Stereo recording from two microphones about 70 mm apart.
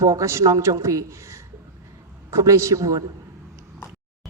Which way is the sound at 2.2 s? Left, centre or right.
Right.